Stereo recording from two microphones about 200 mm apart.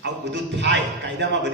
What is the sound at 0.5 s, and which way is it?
Speech, 60° right (ahead or behind).